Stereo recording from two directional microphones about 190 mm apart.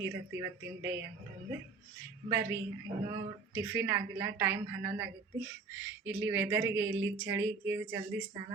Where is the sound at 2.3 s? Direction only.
15° right (ahead or behind).